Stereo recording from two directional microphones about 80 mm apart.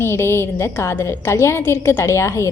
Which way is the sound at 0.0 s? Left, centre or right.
Left.